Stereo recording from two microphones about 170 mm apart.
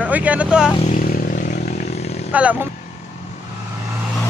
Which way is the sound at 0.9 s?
50° left (ahead or behind).